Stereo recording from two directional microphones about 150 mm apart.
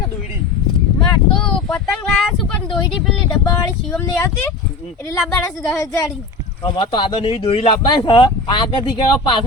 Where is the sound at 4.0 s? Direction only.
15° left (ahead or behind).